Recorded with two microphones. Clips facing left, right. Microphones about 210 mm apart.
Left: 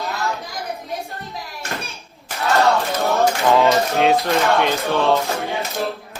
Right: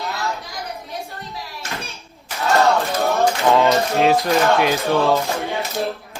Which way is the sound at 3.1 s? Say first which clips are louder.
Left 1 dB; centre (ahead or behind).